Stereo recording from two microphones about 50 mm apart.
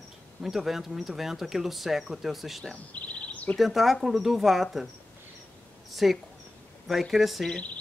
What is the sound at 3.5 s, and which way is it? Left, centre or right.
Speech, centre.